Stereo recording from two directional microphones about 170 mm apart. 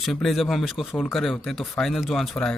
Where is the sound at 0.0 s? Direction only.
Centre (ahead or behind).